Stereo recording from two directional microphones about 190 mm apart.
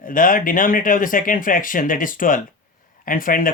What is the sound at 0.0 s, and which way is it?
Speech, 45° left (ahead or behind).